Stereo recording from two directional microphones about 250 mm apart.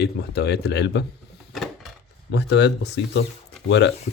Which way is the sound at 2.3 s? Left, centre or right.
Left.